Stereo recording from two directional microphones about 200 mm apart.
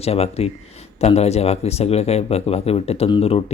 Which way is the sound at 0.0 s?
30° left (ahead or behind).